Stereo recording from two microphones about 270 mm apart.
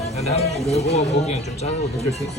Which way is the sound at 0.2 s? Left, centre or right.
Left.